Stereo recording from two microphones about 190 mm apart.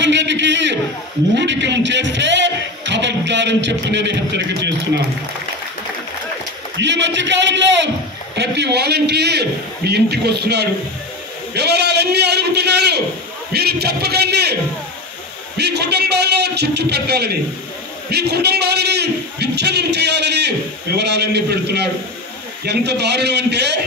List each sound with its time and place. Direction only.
0.0 s a sound: 70° right (ahead or behind)
1.3 s a man's voice: 70° right (ahead or behind)
6.8 s a man's voice: 70° right (ahead or behind)